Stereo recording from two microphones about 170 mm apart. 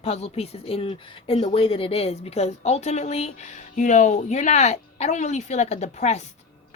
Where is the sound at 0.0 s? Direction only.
35° left (ahead or behind).